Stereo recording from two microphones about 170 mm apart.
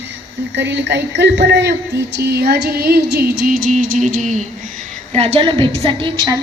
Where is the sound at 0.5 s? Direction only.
90° right.